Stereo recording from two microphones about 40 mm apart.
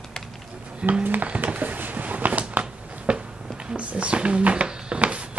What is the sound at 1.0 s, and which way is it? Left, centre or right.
Speech, right.